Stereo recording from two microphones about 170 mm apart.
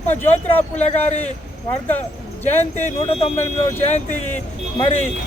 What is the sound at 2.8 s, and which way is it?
Speech, 35° left (ahead or behind).